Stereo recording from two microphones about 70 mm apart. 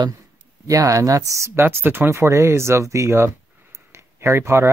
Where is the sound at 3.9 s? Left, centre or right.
Right.